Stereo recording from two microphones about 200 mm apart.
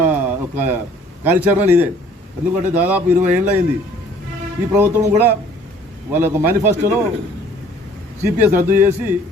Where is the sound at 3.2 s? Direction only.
35° right (ahead or behind).